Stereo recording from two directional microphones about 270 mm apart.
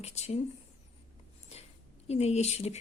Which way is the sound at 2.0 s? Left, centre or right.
Left.